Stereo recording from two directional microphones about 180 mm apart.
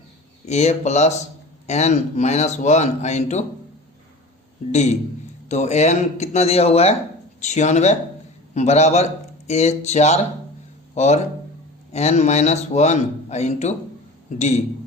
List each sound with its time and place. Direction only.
0.4 s a man's voice: 40° left (ahead or behind)
4.7 s a man's voice: 40° left (ahead or behind)